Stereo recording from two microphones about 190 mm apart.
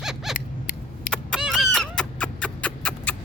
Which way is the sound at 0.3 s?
45° left (ahead or behind).